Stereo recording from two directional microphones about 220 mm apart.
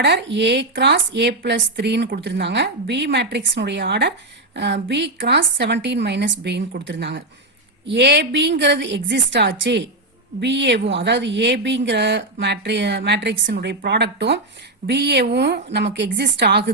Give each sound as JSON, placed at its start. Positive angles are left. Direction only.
{"t": 0.0, "sound": "a woman's voice", "side_deg": -55}